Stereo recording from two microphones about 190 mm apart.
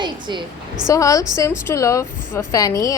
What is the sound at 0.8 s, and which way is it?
A woman's voice, 15° left (ahead or behind).